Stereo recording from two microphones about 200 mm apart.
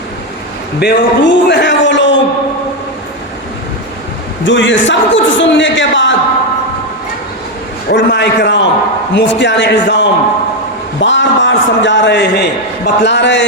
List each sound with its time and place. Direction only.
0.8 s a man's voice: 60° left (ahead or behind)
4.4 s a man's voice: 65° left (ahead or behind)
7.9 s a man's voice: 60° left (ahead or behind)